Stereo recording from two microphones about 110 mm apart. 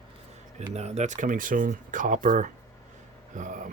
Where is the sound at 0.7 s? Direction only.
85° right.